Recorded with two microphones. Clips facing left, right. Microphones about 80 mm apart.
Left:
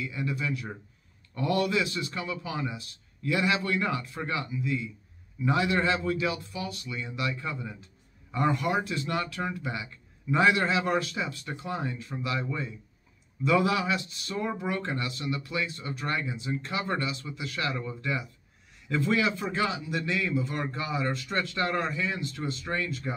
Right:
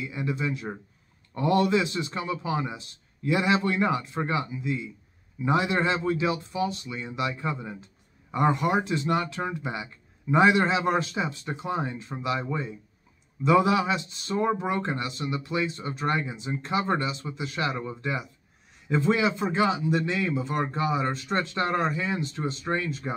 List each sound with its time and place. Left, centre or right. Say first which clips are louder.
0.0 s a man's voice: right 2 dB; right